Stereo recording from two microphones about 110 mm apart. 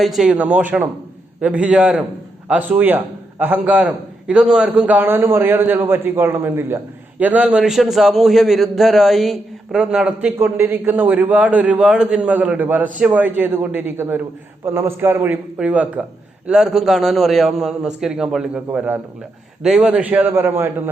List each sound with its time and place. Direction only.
0.0 s a man's voice: 5° right (ahead or behind)
10.3 s a man's voice: 20° right (ahead or behind)